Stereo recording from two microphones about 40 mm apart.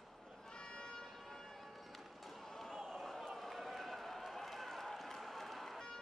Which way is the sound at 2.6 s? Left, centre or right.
Centre.